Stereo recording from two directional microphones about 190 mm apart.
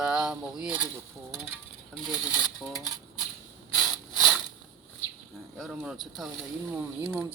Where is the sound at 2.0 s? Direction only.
5° right (ahead or behind).